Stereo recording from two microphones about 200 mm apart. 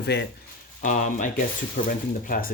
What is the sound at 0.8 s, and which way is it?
Speech, 40° left (ahead or behind).